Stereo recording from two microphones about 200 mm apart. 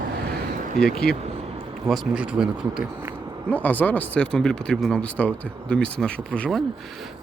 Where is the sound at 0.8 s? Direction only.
5° left (ahead or behind).